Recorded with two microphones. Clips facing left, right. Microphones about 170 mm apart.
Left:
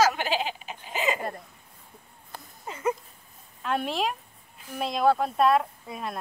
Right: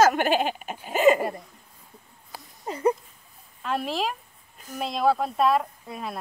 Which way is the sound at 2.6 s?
35° right (ahead or behind).